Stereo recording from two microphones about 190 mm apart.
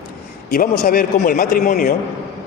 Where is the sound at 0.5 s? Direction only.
50° left (ahead or behind).